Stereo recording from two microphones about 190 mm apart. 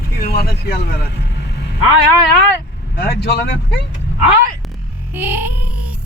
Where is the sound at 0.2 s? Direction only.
55° left (ahead or behind).